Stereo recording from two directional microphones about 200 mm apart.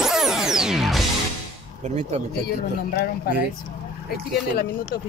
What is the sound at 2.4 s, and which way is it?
Speech, 50° left (ahead or behind).